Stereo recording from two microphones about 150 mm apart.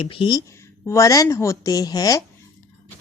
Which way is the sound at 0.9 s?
20° left (ahead or behind).